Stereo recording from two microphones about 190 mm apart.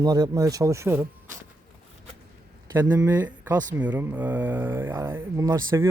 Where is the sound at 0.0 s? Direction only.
20° right (ahead or behind).